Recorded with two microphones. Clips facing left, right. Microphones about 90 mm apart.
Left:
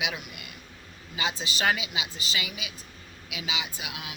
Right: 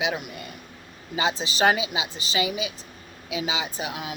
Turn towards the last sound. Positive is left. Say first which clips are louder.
# right 7 dB
turn(degrees=-35)  # may be behind; listen again after turning